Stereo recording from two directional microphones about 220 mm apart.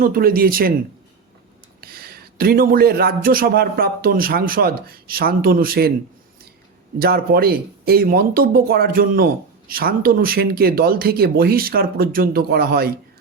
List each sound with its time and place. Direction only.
0.0 s speech: 40° right (ahead or behind)
1.8 s speech: 45° right (ahead or behind)
7.0 s speech: 45° right (ahead or behind)